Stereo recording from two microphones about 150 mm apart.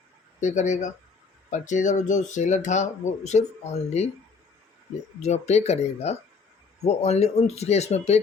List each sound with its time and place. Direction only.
0.3 s speech: 55° left (ahead or behind)
5.2 s speech: 45° left (ahead or behind)